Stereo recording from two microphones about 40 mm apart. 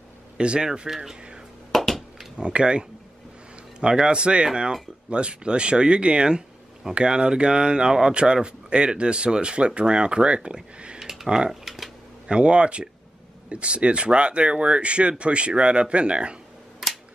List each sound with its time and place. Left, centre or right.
0.4 s speech: right
0.8 s speech: centre
1.7 s a sound: centre
2.3 s speech: right
11.6 s a sound: centre
12.3 s speech: right